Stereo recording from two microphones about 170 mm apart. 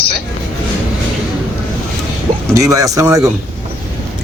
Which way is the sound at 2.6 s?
20° right (ahead or behind).